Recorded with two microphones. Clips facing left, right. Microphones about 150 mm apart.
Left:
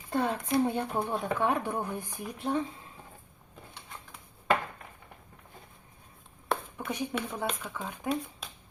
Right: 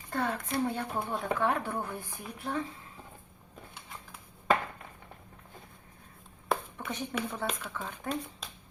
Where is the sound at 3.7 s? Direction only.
Centre (ahead or behind).